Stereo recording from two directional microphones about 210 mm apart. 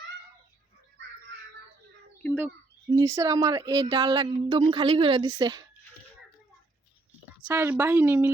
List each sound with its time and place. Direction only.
2.9 s a woman's voice: 15° right (ahead or behind)
7.4 s a woman's voice: 10° right (ahead or behind)